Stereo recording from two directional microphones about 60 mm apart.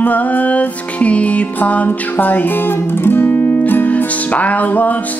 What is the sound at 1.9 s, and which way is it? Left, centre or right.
Speech, left.